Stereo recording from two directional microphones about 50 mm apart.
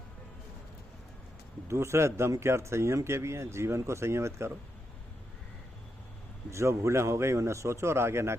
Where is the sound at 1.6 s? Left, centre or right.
Right.